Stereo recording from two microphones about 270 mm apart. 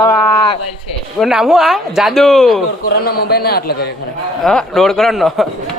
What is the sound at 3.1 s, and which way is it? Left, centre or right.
Speech, left.